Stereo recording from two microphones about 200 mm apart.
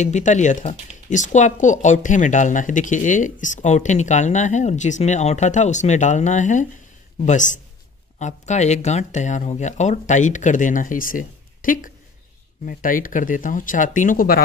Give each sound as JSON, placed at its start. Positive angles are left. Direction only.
{"t": 0.0, "sound": "speech", "side_deg": 35}